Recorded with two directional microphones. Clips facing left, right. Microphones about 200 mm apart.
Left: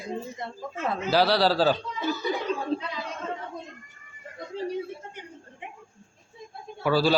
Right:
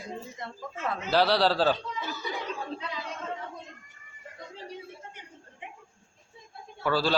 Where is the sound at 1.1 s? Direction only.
5° left (ahead or behind).